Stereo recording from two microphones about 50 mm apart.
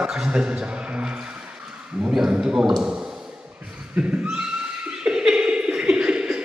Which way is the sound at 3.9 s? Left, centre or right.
Right.